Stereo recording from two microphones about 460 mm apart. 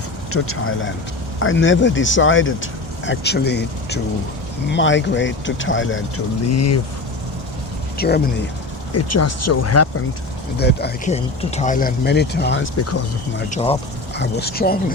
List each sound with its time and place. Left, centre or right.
0.3 s speech: left
7.9 s speech: left
8.9 s speech: left
10.6 s speech: left
13.5 s speech: centre